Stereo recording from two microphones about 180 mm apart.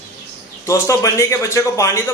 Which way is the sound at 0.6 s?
15° left (ahead or behind).